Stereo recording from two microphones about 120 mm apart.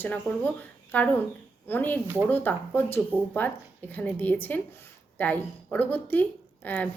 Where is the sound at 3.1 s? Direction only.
15° right (ahead or behind).